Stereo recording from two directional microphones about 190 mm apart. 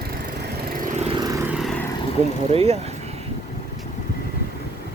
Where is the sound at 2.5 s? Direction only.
30° right (ahead or behind).